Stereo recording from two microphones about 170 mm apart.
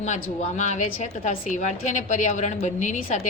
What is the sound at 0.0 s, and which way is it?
A woman's voice, 45° left (ahead or behind).